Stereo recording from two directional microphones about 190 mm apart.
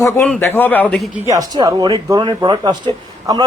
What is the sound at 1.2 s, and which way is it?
Speech, 20° right (ahead or behind).